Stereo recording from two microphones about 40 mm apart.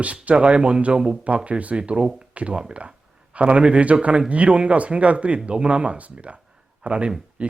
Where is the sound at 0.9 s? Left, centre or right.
Centre.